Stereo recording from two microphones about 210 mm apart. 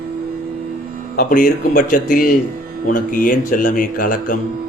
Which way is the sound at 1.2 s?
45° left (ahead or behind).